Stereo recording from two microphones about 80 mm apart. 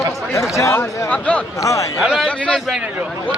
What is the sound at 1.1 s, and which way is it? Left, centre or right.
Speech, centre.